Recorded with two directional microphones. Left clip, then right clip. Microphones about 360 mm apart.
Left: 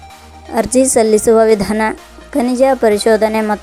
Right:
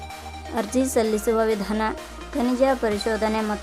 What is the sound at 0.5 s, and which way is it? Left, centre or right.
A woman's voice, centre.